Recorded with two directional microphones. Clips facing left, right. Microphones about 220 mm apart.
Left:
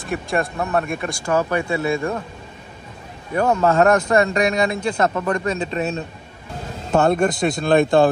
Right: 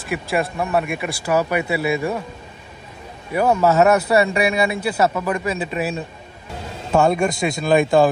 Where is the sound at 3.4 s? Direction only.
10° right (ahead or behind).